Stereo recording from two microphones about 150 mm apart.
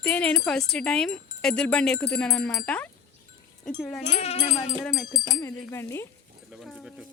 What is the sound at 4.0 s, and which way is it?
Speech, 45° left (ahead or behind).